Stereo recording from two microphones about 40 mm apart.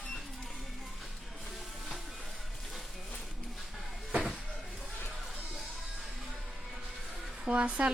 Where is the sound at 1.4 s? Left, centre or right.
Centre.